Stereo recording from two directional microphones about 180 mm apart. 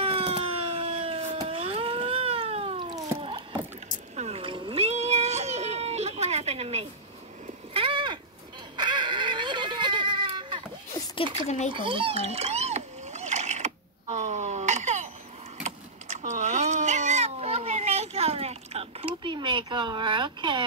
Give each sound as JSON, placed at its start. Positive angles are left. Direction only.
{"t": 0.0, "sound": "a sound", "side_deg": -30}
{"t": 11.4, "sound": "a child's voice", "side_deg": 40}
{"t": 11.7, "sound": "splash", "side_deg": -30}
{"t": 15.6, "sound": "cat", "side_deg": -40}